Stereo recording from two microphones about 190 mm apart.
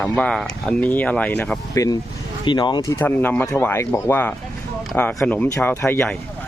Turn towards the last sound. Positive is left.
turn(degrees=10)  # may be behind; listen again after turning